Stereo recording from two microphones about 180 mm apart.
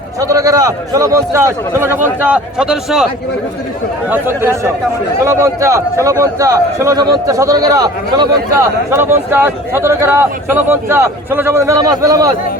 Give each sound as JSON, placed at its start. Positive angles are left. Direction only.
{"t": 0.2, "sound": "a man's voice", "side_deg": -20}
{"t": 4.1, "sound": "a man's voice", "side_deg": -15}